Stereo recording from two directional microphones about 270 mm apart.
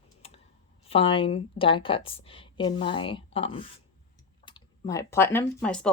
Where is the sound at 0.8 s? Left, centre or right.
Centre.